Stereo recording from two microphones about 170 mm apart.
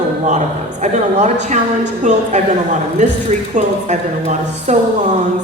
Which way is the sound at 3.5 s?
45° right (ahead or behind).